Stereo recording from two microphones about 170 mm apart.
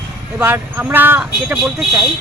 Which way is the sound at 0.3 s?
10° right (ahead or behind).